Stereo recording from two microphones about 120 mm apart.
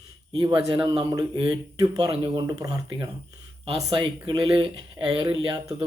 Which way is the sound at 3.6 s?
40° right (ahead or behind).